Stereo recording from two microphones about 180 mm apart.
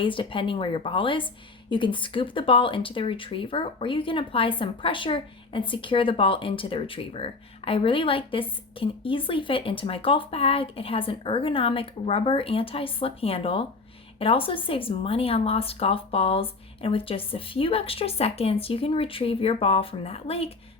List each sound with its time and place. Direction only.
0.0 s speech: 30° left (ahead or behind)